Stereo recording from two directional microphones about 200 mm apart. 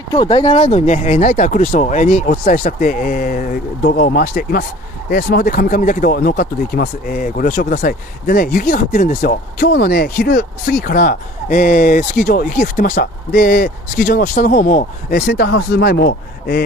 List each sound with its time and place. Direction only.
0.1 s speech: 25° left (ahead or behind); by 16.6 s 50° left (ahead or behind)